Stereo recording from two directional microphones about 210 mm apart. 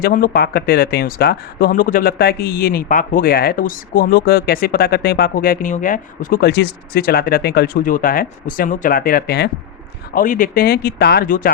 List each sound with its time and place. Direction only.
0.0 s speech: 45° left (ahead or behind)